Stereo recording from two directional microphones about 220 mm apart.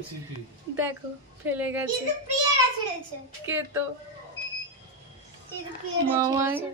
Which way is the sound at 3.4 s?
10° right (ahead or behind).